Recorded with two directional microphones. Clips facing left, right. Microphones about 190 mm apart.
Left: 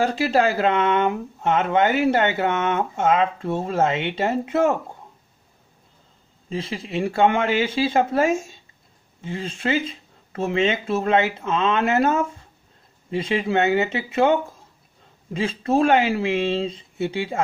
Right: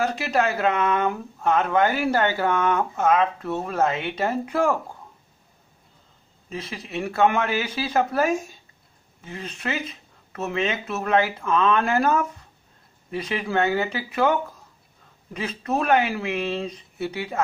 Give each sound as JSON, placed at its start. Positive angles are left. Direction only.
{"t": 0.0, "sound": "speech", "side_deg": 30}
{"t": 6.5, "sound": "speech", "side_deg": 30}